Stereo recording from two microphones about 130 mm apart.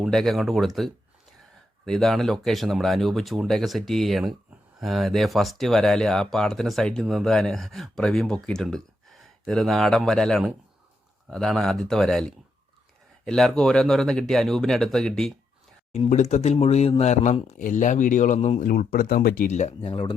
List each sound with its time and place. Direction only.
0.0 s speech: centre (ahead or behind)
15.9 s speech: 65° left (ahead or behind)
18.6 s speech: 90° left; by 19.7 s 65° left (ahead or behind)
19.8 s speech: 45° left (ahead or behind)